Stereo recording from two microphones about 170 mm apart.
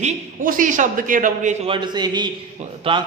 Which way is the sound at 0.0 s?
55° right (ahead or behind).